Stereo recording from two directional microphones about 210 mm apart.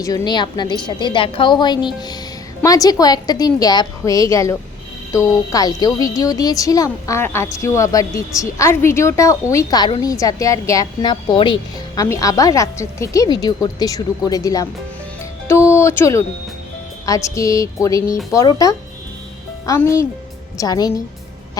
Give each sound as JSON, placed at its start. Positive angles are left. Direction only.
{"t": 0.0, "sound": "a woman's voice", "side_deg": 15}
{"t": 15.2, "sound": "music", "side_deg": 15}
{"t": 17.1, "sound": "speech", "side_deg": 15}